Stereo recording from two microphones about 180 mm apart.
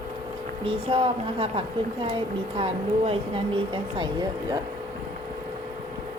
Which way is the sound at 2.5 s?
30° right (ahead or behind).